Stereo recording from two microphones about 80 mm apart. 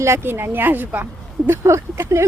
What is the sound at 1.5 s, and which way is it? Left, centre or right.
Speech, right.